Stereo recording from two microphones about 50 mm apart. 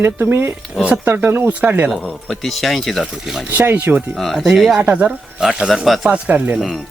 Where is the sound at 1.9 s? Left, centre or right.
Centre.